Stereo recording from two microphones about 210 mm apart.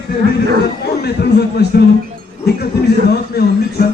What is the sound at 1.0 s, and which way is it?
Speech, 50° left (ahead or behind).